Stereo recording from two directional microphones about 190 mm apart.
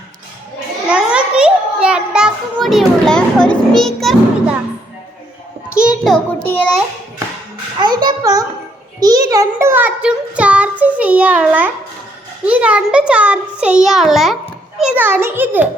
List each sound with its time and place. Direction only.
0.9 s a sound: 5° right (ahead or behind)
6.1 s a child's voice: 10° left (ahead or behind)
7.8 s a child's voice: 20° right (ahead or behind)
9.0 s child singing: 20° right (ahead or behind)